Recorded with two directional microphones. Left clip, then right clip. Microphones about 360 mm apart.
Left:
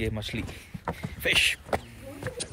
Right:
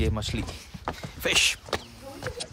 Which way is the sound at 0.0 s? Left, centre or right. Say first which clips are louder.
Right 2 dB; centre.